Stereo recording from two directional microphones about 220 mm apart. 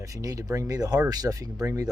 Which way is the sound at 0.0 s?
15° right (ahead or behind).